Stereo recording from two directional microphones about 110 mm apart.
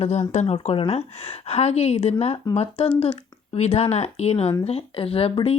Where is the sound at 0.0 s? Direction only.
85° left.